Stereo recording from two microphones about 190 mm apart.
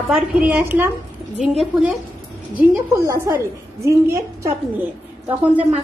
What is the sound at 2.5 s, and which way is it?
A woman's voice, 15° right (ahead or behind).